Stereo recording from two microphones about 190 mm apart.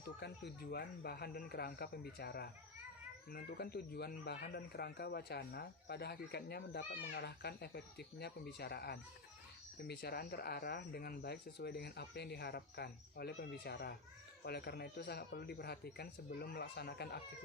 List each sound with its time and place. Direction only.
0.2 s speech: 60° left (ahead or behind)